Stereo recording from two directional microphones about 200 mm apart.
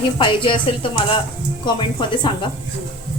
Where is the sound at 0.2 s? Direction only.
25° left (ahead or behind).